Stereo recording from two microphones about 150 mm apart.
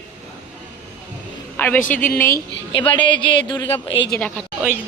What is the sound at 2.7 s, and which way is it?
Speech, 35° left (ahead or behind).